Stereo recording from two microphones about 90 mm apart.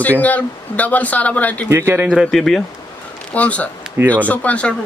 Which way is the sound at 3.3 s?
15° left (ahead or behind).